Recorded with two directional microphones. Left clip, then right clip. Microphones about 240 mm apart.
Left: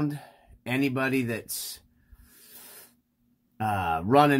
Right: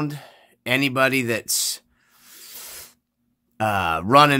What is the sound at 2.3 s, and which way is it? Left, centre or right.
Snake, right.